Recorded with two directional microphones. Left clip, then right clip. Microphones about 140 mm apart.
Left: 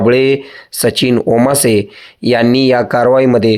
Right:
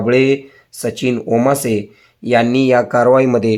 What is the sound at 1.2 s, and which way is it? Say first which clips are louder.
Speech: even; 25° left (ahead or behind).